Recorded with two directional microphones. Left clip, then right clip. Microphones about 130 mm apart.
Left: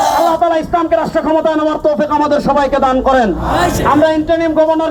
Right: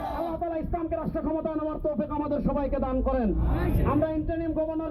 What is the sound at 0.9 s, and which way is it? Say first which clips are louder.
Speech: left 17 dB; 25° right (ahead or behind).